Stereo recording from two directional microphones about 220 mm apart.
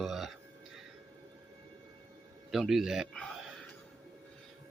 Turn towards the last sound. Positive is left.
turn(degrees=0)  # may be behind; listen again after turning